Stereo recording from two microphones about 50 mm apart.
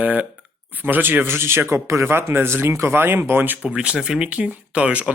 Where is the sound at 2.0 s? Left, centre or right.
Right.